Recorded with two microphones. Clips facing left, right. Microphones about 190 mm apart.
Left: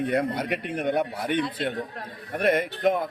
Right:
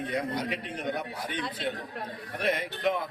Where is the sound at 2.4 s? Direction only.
50° left (ahead or behind).